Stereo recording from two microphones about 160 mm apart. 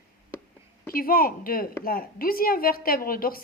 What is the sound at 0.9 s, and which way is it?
A woman's voice, 65° left (ahead or behind).